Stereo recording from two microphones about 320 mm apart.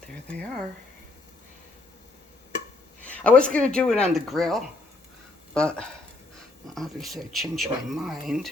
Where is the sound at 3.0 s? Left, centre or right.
Centre.